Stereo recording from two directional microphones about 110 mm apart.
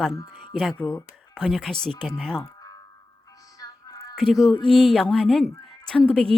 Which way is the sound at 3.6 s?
35° left (ahead or behind).